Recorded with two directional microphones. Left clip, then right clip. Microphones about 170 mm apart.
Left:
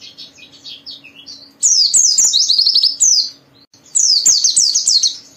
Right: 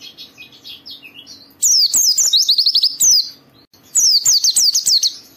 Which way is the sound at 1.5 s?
45° right (ahead or behind).